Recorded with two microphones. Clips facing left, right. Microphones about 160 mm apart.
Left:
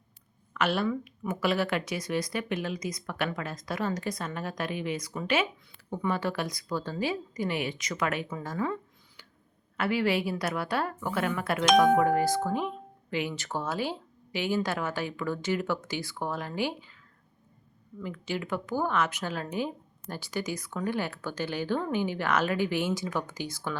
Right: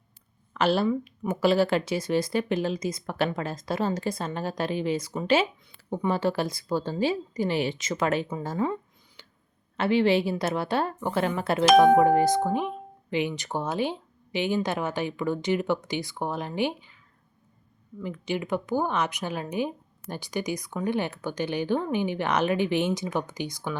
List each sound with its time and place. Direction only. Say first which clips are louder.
0.5 s speech: right 4 dB; 30° right (ahead or behind)
18.0 s speech: right 3 dB; 20° right (ahead or behind)